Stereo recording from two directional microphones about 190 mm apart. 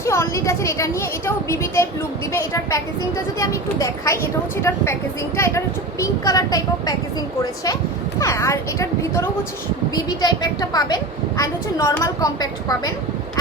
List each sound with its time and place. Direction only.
0.0 s a woman's voice: 15° left (ahead or behind)
8.2 s a woman's voice: 15° left (ahead or behind)